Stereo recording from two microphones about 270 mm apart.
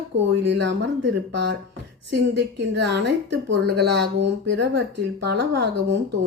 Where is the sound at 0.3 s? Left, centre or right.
Right.